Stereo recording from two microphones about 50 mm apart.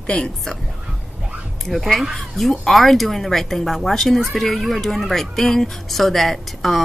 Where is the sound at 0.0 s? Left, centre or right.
Centre.